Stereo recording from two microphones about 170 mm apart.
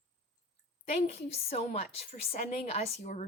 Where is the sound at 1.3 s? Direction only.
35° left (ahead or behind).